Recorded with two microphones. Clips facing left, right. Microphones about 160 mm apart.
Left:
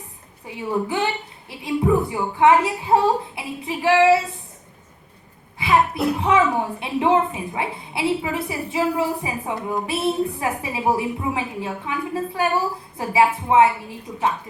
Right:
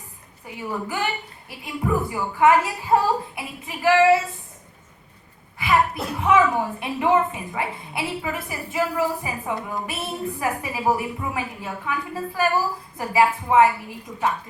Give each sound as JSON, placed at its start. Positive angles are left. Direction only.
{"t": 0.4, "sound": "speech", "side_deg": 25}
{"t": 6.1, "sound": "speech", "side_deg": 25}